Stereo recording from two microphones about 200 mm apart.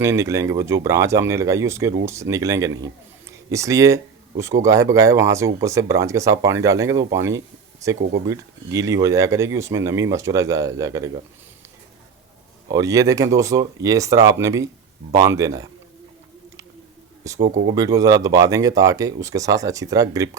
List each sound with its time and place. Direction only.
0.0 s speech: 15° right (ahead or behind)
12.6 s speech: 15° right (ahead or behind)
17.2 s speech: 15° right (ahead or behind)